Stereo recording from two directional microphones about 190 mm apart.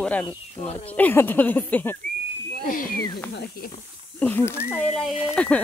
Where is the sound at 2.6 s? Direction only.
45° left (ahead or behind).